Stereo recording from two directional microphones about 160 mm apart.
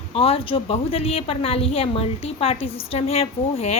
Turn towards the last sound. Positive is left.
turn(degrees=40)  # may be behind; listen again after turning